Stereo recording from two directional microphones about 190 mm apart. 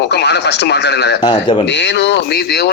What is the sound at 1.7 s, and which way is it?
A man's voice, 70° left (ahead or behind).